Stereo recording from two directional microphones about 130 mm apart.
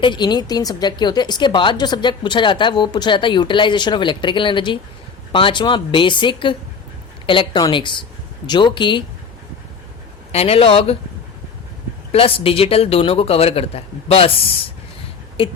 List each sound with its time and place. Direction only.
0.0 s a woman's voice: 35° left (ahead or behind)
10.3 s speech: 50° left (ahead or behind)
12.1 s speech: 45° left (ahead or behind)
15.4 s speech: 45° left (ahead or behind)